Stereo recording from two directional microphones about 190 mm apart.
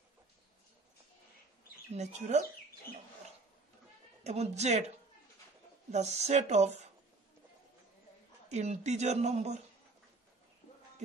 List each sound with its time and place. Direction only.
1.9 s speech: 35° right (ahead or behind)
4.2 s speech: 35° right (ahead or behind)
8.5 s speech: 35° right (ahead or behind)